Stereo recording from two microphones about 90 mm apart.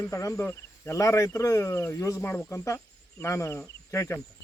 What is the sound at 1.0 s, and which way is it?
Speech, 40° left (ahead or behind).